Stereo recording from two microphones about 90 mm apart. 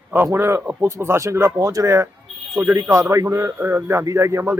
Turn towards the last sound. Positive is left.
turn(degrees=-30)  # may be behind; listen again after turning